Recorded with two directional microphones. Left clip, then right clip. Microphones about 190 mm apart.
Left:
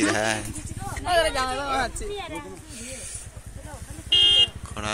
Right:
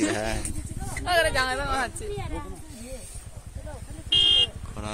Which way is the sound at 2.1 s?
65° right (ahead or behind).